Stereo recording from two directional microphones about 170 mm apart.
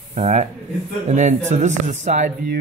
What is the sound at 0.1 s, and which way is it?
Speech, 45° right (ahead or behind).